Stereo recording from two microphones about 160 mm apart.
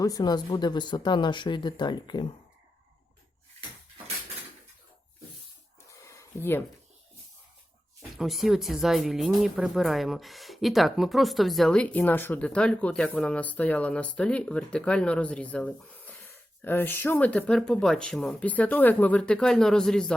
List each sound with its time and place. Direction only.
0.0 s speech: 25° left (ahead or behind)
5.9 s a sound: 15° left (ahead or behind)
8.1 s speech: centre (ahead or behind)